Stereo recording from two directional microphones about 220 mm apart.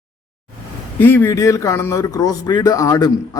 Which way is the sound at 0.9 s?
10° left (ahead or behind).